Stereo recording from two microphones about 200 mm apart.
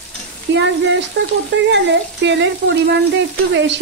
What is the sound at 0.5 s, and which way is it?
Frying, 65° right (ahead or behind).